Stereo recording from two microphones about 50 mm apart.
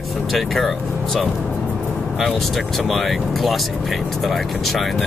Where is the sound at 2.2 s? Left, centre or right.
Centre.